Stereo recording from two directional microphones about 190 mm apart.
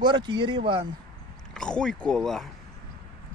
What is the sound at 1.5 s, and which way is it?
Speech, 5° left (ahead or behind).